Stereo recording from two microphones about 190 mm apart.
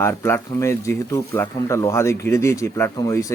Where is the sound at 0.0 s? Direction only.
15° left (ahead or behind).